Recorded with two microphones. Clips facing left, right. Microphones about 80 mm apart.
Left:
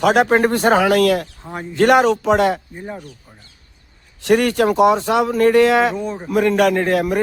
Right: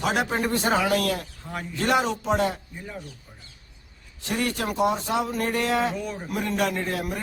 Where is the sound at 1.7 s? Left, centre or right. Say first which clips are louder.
Left 11 dB; left.